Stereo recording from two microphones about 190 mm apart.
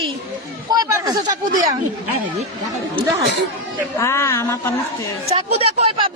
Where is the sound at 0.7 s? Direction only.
20° right (ahead or behind).